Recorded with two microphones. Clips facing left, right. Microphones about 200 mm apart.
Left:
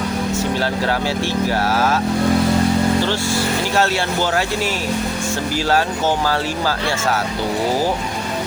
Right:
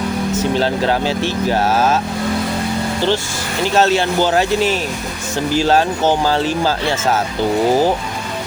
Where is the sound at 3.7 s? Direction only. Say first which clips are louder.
Right 7 dB; 20° right (ahead or behind).